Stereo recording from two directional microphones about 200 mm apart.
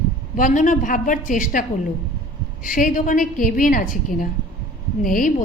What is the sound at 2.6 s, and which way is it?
A woman's voice, 40° left (ahead or behind).